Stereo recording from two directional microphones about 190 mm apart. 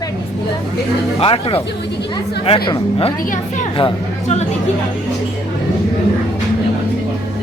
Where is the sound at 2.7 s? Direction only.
25° left (ahead or behind).